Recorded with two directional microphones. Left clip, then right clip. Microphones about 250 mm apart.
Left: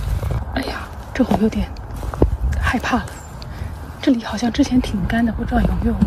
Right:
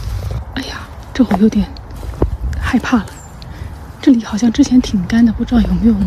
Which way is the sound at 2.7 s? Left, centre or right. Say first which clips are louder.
Right 3 dB; centre.